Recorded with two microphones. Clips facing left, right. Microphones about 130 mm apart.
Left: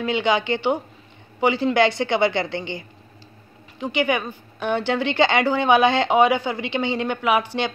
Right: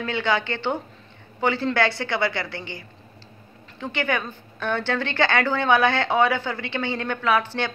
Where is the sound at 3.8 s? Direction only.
15° left (ahead or behind).